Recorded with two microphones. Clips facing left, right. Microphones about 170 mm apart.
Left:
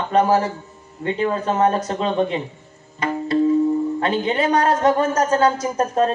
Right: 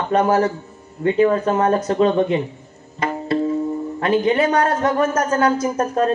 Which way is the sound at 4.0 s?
30° left (ahead or behind).